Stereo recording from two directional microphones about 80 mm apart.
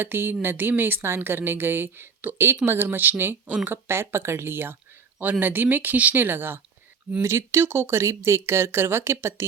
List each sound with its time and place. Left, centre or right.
0.0 s speech: right